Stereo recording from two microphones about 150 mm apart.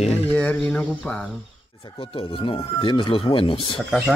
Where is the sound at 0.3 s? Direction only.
10° left (ahead or behind).